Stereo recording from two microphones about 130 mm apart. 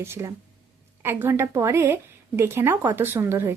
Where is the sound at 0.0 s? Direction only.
20° right (ahead or behind).